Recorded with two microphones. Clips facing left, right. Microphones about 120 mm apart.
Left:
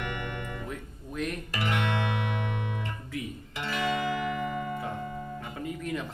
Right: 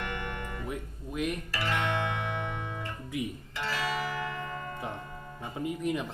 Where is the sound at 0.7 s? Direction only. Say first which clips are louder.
Right 2 dB; 15° right (ahead or behind).